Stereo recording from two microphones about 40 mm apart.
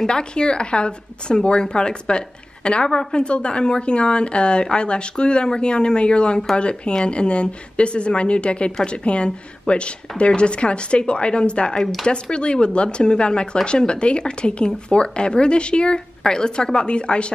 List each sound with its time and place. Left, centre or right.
0.0 s speech: left